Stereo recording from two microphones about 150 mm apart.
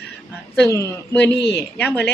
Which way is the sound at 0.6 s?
20° left (ahead or behind).